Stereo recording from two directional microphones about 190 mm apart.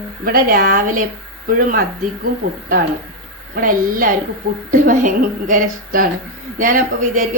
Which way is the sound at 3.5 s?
45° right (ahead or behind).